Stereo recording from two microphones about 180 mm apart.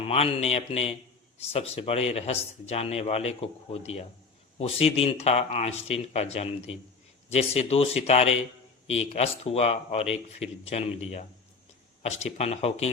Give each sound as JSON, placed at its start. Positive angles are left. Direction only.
{"t": 0.1, "sound": "speech", "side_deg": 35}